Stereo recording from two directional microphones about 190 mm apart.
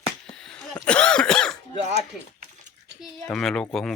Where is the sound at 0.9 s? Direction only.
5° left (ahead or behind).